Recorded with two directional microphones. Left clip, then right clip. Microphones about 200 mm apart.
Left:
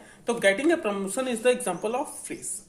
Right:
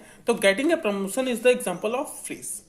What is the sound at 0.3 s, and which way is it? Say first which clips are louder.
A woman's voice: right 2 dB; 35° right (ahead or behind).